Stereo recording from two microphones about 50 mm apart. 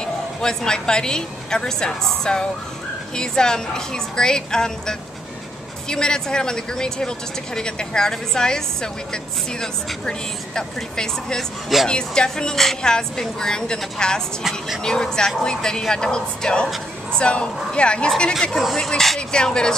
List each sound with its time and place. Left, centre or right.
0.0 s a woman's voice: centre
18.5 s speech: centre
18.8 s speech: centre